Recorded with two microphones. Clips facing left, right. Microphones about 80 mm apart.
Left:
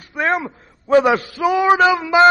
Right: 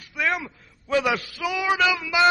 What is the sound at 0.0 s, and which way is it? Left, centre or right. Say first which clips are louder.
A man's voice: left 6 dB; left.